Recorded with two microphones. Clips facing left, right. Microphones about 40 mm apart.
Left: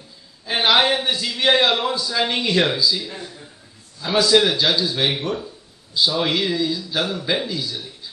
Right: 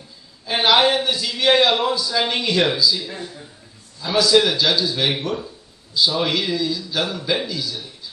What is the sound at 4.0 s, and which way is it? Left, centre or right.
A man's voice, centre.